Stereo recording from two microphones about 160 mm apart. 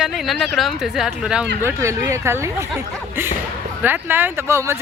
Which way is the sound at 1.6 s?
15° right (ahead or behind).